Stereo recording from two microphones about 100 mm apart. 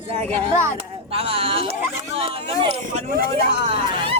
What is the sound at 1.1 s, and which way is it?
Speech, 80° right.